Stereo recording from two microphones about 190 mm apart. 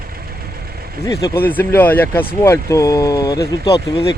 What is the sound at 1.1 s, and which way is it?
Speech, 15° left (ahead or behind).